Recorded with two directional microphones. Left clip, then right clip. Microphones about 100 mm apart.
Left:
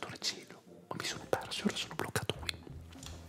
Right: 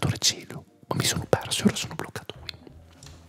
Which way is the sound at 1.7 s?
30° right (ahead or behind).